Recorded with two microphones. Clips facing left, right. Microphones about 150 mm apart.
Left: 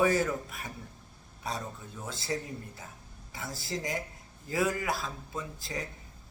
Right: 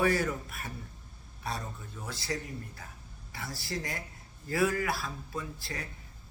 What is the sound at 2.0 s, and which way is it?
Speech, 20° left (ahead or behind).